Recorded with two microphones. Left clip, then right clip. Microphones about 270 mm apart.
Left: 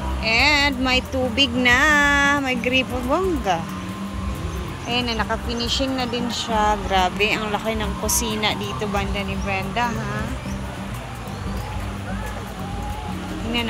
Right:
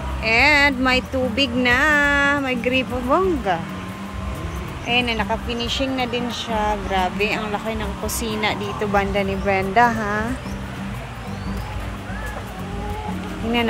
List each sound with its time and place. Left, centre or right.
0.2 s speech: centre
4.8 s a woman's voice: centre